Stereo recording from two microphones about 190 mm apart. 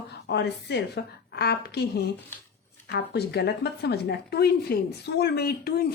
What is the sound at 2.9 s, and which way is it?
Speech, 60° left (ahead or behind).